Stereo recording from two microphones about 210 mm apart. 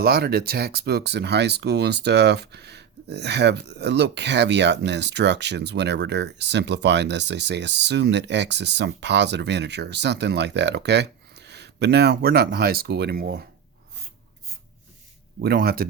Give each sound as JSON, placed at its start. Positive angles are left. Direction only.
{"t": 0.0, "sound": "speech", "side_deg": -50}
{"t": 15.4, "sound": "speech", "side_deg": -50}